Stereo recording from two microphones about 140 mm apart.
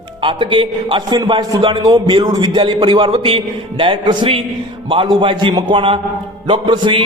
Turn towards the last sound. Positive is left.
turn(degrees=-35)  # may be behind; listen again after turning